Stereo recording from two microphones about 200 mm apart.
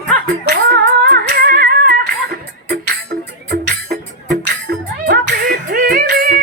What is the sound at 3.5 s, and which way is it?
Music, 55° right (ahead or behind).